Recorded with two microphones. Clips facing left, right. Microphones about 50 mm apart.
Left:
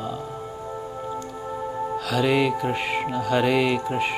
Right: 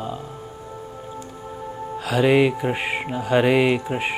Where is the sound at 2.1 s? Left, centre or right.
Centre.